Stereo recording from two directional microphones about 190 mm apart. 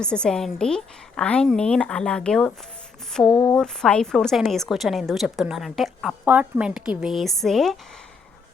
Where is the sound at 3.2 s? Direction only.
20° left (ahead or behind).